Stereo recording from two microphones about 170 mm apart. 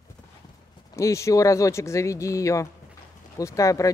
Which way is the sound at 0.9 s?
15° left (ahead or behind).